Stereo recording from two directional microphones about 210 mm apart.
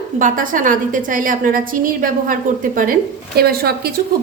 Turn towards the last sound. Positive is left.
turn(degrees=-45)  # may be behind; listen again after turning